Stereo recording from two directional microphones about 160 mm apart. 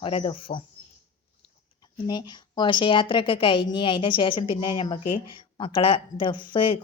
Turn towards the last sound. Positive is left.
turn(degrees=35)  # may be behind; listen again after turning